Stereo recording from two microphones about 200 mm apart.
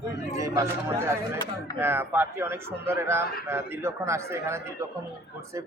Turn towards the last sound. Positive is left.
turn(degrees=-15)  # may be behind; listen again after turning